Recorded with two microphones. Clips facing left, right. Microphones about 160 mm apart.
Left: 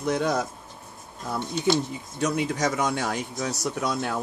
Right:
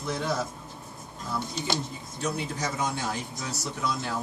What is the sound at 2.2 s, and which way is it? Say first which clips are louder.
Speech: left 6 dB; 85° left.